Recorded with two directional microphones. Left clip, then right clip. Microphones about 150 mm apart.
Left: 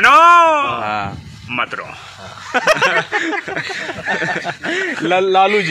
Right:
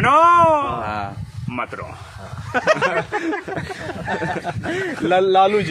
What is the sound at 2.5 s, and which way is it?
Speech, 40° left (ahead or behind).